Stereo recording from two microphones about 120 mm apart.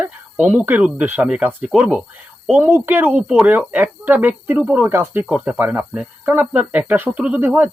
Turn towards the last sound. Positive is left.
turn(degrees=-15)  # may be behind; listen again after turning